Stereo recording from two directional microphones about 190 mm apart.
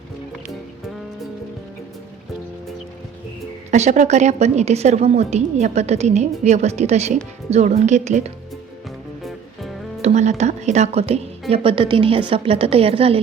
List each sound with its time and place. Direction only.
3.7 s a woman's voice: 40° right (ahead or behind)
10.0 s a woman's voice: 35° right (ahead or behind)